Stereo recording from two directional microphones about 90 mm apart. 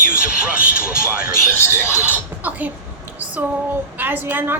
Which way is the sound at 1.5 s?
30° left (ahead or behind).